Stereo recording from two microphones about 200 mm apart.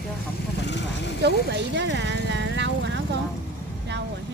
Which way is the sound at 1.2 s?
60° right (ahead or behind).